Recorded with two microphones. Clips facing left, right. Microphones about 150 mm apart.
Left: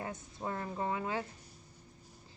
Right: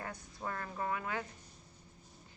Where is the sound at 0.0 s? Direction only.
20° left (ahead or behind).